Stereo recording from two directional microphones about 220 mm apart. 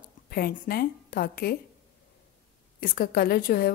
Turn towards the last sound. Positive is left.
turn(degrees=40)  # may be behind; listen again after turning